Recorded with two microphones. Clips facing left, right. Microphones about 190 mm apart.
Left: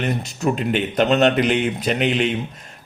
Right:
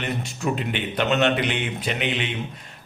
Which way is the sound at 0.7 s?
40° left (ahead or behind).